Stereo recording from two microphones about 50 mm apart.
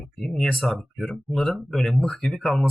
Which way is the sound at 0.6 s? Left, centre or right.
Centre.